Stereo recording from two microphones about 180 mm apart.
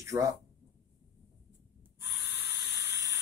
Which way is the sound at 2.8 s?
15° right (ahead or behind).